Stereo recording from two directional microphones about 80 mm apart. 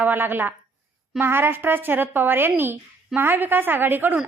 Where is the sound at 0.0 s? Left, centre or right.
Right.